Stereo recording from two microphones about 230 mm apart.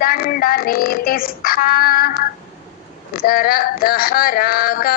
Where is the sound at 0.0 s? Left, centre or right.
Left.